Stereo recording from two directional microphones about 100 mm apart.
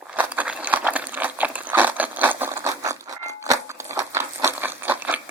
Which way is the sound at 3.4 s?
30° right (ahead or behind).